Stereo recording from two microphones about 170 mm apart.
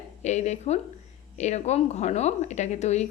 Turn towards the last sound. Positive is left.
turn(degrees=40)  # may be behind; listen again after turning